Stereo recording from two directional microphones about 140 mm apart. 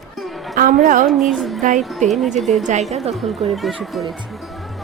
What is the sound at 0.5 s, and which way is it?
Speech, 80° right.